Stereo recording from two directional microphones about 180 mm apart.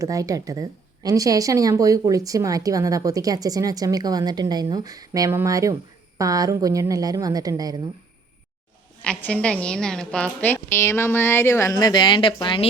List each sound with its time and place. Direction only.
0.0 s a woman's voice: 20° right (ahead or behind)
9.0 s a woman's voice: 5° left (ahead or behind); by 12.6 s 25° left (ahead or behind)